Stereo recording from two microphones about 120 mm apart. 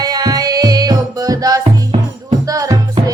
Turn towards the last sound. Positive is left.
turn(degrees=-30)  # may be behind; listen again after turning